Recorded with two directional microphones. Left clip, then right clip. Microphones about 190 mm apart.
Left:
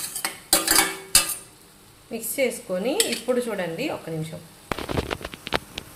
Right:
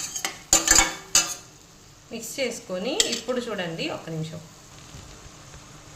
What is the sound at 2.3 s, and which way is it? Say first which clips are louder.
Speech: left 4 dB; 25° left (ahead or behind).